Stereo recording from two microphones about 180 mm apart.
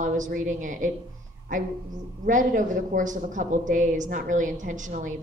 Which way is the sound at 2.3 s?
45° right (ahead or behind).